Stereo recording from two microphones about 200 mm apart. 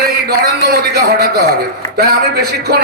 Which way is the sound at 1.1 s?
50° right (ahead or behind).